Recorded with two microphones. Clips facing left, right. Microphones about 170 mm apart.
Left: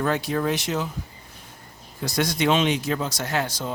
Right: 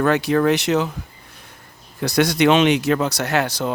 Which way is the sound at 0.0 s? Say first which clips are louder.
Right 7 dB; 70° right (ahead or behind).